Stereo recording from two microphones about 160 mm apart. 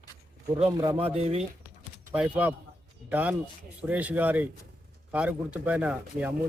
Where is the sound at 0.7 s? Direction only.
20° right (ahead or behind).